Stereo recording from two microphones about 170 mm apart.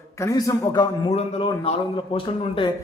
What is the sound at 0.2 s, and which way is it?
Speech, 20° left (ahead or behind).